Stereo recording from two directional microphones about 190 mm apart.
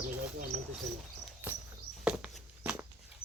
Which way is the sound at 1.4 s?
10° right (ahead or behind).